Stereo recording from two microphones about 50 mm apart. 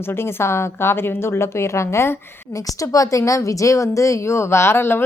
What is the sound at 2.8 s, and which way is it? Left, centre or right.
A woman's voice, left.